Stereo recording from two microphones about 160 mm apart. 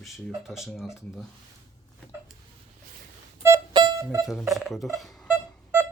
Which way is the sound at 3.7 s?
25° right (ahead or behind).